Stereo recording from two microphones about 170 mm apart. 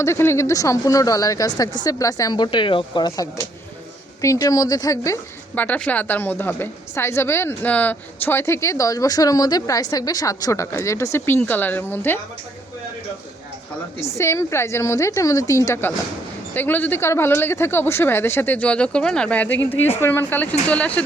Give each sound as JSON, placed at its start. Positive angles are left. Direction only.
{"t": 0.0, "sound": "a woman's voice", "side_deg": 15}
{"t": 14.0, "sound": "a woman's voice", "side_deg": 15}